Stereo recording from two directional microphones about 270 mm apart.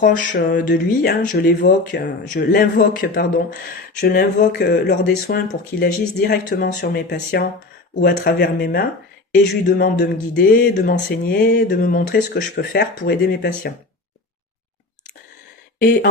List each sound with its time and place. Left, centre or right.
0.0 s speech: left
15.8 s speech: left